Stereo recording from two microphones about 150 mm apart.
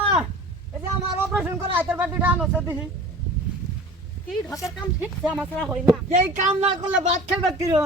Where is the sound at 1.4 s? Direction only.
15° right (ahead or behind).